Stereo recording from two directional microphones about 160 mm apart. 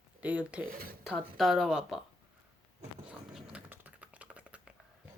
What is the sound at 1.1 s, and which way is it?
Speech, centre (ahead or behind).